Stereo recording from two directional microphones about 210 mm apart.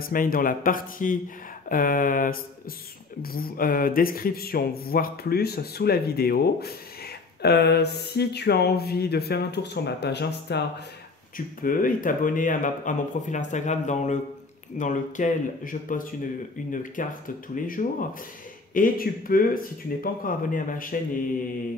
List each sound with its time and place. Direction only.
0.0 s speech: 45° left (ahead or behind)
11.3 s speech: 40° left (ahead or behind)